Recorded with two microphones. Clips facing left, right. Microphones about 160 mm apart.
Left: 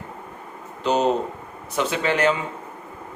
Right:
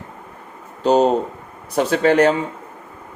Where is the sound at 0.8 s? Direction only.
40° right (ahead or behind).